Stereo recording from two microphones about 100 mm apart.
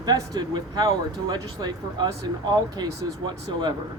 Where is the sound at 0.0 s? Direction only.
45° right (ahead or behind).